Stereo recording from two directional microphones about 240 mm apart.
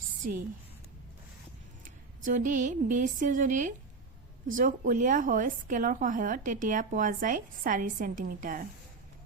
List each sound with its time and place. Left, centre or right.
1.8 s a woman's voice: right